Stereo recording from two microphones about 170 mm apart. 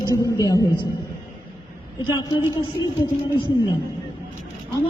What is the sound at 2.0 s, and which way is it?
Speech, 25° left (ahead or behind).